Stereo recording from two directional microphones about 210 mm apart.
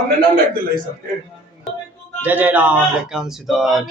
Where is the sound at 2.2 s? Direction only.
10° right (ahead or behind).